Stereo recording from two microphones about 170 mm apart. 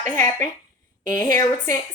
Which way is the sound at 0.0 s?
20° left (ahead or behind).